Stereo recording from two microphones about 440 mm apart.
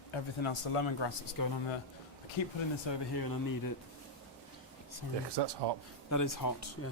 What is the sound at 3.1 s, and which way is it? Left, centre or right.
Speech, left.